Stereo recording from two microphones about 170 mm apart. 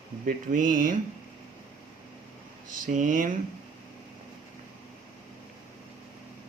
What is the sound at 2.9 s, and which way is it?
Speech, 50° right (ahead or behind).